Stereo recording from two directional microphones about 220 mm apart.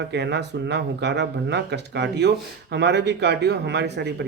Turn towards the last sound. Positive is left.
turn(degrees=-50)  # may be behind; listen again after turning